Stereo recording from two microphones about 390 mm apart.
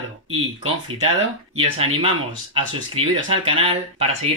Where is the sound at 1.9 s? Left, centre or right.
Centre.